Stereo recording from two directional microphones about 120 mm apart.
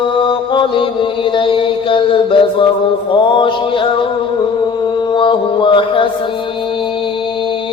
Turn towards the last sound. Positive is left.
turn(degrees=45)  # may be behind; listen again after turning